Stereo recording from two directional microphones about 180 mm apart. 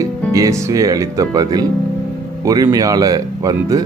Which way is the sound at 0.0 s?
20° right (ahead or behind).